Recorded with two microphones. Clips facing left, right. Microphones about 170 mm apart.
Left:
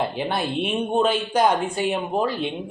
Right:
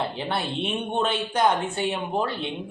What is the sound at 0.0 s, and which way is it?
Speech, 15° left (ahead or behind).